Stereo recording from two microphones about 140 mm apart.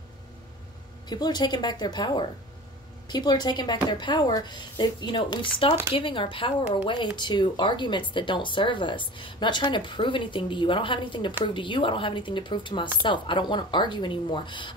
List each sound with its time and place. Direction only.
1.0 s speech: 30° left (ahead or behind)